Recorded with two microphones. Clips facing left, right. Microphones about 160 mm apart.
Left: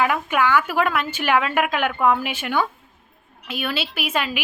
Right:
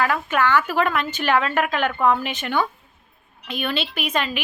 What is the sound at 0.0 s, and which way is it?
A woman's voice, 15° left (ahead or behind).